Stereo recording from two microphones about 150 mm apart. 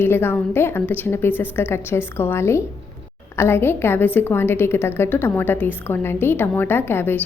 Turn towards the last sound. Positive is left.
turn(degrees=15)  # may be behind; listen again after turning